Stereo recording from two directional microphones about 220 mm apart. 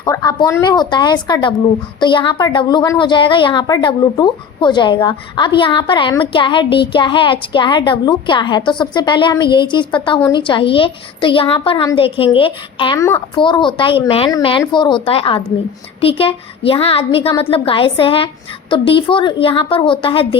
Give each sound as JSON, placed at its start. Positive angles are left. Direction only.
{"t": 0.0, "sound": "a woman's voice", "side_deg": 15}